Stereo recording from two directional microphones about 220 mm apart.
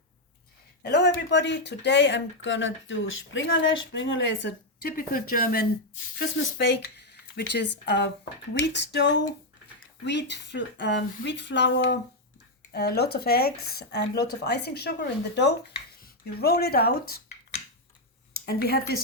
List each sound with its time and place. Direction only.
0.8 s speech: 50° left (ahead or behind)
6.1 s speech: 50° left (ahead or behind)
6.8 s a sound: 45° left (ahead or behind)
7.9 s speech: 50° left (ahead or behind)
18.4 s speech: 45° left (ahead or behind)